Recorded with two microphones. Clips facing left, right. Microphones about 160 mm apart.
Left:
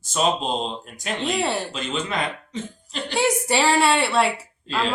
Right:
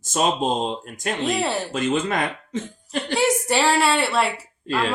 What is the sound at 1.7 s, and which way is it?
Speech, 50° right (ahead or behind).